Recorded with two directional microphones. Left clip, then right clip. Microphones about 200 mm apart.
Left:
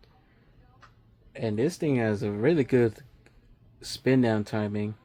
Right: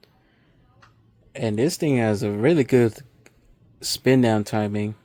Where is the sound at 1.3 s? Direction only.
50° right (ahead or behind).